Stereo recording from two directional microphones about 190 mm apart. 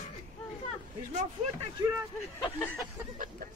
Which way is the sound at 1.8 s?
20° right (ahead or behind).